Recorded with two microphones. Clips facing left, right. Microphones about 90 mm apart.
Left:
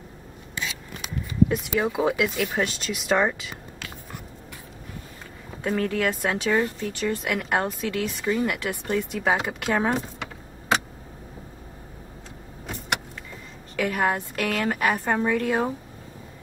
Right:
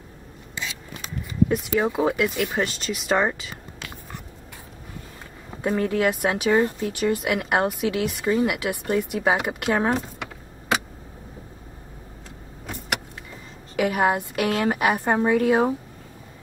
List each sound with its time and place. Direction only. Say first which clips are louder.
1.8 s speech: right 1 dB; centre (ahead or behind)
5.6 s a woman's voice: right 3 dB; 15° right (ahead or behind)
6.5 s speech: right 4 dB; 20° right (ahead or behind)
7.0 s a woman's voice: right 4 dB; 10° right (ahead or behind)
13.7 s a woman's voice: right 3 dB; 15° right (ahead or behind)